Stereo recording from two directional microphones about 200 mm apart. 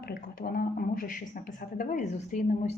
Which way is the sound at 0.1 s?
45° left (ahead or behind).